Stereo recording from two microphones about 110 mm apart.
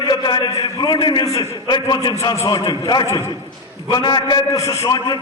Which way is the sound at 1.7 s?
40° left (ahead or behind).